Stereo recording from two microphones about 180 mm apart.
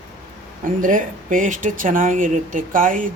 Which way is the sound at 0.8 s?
45° right (ahead or behind).